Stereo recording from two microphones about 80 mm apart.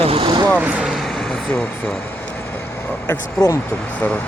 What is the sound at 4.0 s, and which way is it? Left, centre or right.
Speech, centre.